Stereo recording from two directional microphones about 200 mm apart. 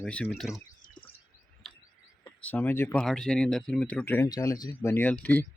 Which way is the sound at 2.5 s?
10° left (ahead or behind).